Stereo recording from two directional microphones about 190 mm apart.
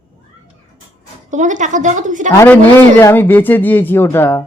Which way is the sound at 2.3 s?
10° left (ahead or behind).